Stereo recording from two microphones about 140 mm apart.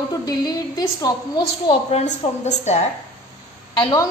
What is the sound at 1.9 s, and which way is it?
Speech, 50° left (ahead or behind).